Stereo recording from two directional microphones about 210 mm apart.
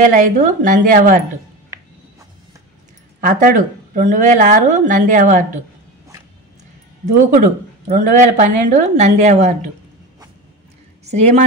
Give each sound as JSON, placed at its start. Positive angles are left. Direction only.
{"t": 0.0, "sound": "speech", "side_deg": -40}
{"t": 3.2, "sound": "speech", "side_deg": -35}
{"t": 7.9, "sound": "speech", "side_deg": -40}
{"t": 11.1, "sound": "speech", "side_deg": -30}